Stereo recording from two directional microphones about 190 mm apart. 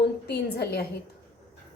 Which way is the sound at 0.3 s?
60° left (ahead or behind).